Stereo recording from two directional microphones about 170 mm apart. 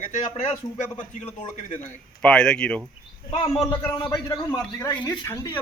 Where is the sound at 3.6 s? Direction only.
20° left (ahead or behind).